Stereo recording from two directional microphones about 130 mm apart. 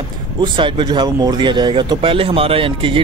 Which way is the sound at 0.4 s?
40° right (ahead or behind).